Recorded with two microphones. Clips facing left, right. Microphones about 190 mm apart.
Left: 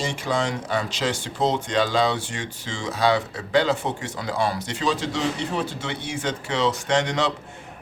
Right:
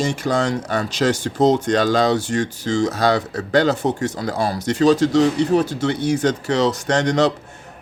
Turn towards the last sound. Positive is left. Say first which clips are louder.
# right 5 dB
turn(degrees=-40)  # may be behind; listen again after turning